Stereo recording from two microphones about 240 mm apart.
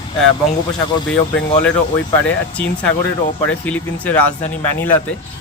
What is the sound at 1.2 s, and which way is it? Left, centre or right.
Speech, left.